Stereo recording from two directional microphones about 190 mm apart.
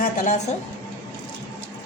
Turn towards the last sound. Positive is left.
turn(degrees=40)  # may be behind; listen again after turning